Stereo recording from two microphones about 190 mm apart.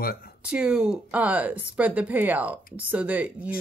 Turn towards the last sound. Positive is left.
turn(degrees=-5)  # may be behind; listen again after turning